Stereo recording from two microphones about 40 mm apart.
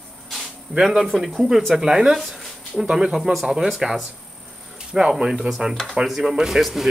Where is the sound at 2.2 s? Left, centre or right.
Centre.